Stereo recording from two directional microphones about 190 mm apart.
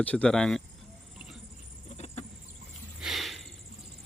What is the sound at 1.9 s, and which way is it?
Chicken, 35° left (ahead or behind).